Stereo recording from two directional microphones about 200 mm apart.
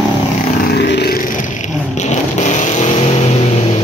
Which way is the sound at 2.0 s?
35° left (ahead or behind).